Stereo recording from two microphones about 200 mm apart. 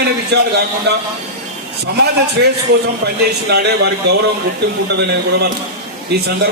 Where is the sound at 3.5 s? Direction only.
55° right (ahead or behind).